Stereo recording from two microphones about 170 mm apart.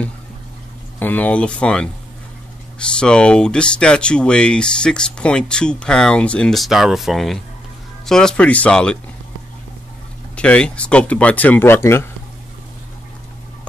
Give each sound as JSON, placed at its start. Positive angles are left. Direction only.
{"t": 0.9, "sound": "speech", "side_deg": 10}
{"t": 3.0, "sound": "speech", "side_deg": 5}
{"t": 10.3, "sound": "speech", "side_deg": 5}